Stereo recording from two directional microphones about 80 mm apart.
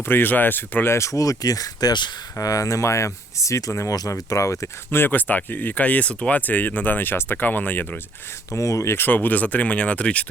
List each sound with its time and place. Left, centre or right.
0.1 s speech: left
2.4 s speech: left
8.5 s speech: left; by 10.2 s centre